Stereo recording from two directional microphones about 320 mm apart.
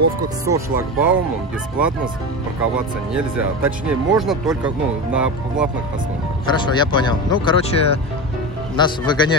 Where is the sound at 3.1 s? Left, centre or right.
Centre.